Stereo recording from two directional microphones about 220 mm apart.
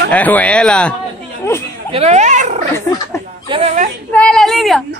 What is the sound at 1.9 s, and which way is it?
A woman's voice, 30° right (ahead or behind).